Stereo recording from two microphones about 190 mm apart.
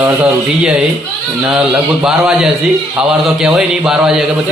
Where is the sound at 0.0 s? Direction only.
5° right (ahead or behind).